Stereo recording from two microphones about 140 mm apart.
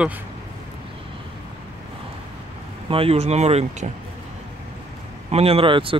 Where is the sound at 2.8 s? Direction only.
45° right (ahead or behind).